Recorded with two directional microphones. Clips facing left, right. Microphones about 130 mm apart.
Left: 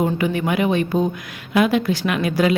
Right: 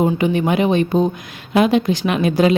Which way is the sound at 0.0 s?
25° right (ahead or behind).